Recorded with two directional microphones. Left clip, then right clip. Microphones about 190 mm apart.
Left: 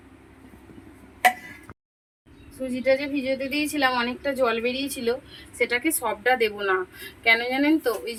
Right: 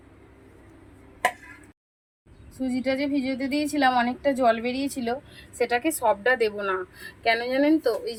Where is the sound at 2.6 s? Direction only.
15° right (ahead or behind).